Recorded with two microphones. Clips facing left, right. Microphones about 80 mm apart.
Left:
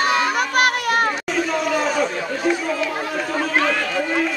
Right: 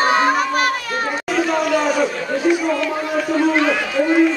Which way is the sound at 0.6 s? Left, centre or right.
Left.